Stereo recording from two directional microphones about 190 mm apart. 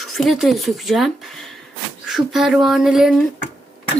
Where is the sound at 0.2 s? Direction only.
Centre (ahead or behind).